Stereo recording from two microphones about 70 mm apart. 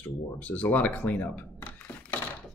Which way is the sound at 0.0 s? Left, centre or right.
Left.